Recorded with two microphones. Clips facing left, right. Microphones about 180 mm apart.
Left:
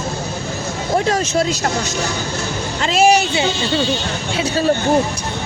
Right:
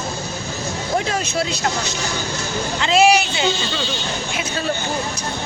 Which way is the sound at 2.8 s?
45° left (ahead or behind).